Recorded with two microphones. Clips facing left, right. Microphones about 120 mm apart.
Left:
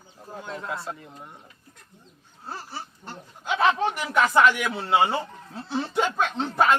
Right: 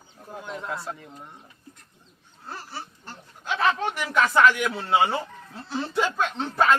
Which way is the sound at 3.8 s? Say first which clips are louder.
Left 2 dB; 20° left (ahead or behind).